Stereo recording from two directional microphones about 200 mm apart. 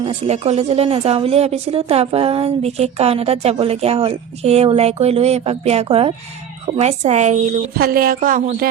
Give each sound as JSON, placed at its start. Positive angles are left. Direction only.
{"t": 0.0, "sound": "speech", "side_deg": -30}
{"t": 7.8, "sound": "speech", "side_deg": -45}